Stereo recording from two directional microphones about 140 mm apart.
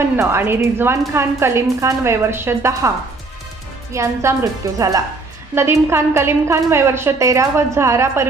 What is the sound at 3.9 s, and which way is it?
A woman's voice, 20° right (ahead or behind).